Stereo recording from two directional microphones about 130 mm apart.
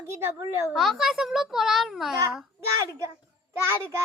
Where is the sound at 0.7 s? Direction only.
Centre (ahead or behind).